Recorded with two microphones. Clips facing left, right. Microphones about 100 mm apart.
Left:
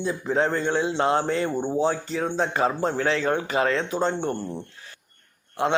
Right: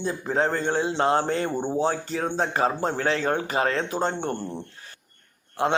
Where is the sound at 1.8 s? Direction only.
50° right (ahead or behind).